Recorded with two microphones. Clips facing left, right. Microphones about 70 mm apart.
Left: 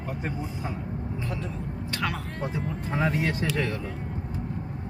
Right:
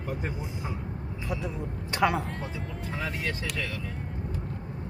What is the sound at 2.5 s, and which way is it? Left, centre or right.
Speech, left.